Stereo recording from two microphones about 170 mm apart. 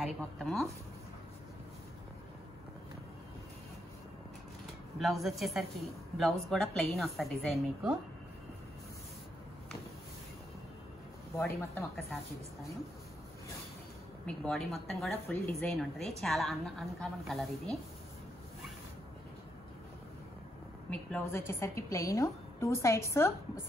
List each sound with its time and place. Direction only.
0.0 s a woman's voice: centre (ahead or behind)
4.9 s a woman's voice: centre (ahead or behind)
11.3 s a woman's voice: 10° left (ahead or behind)
14.2 s a woman's voice: 5° left (ahead or behind)
20.9 s a woman's voice: 10° left (ahead or behind)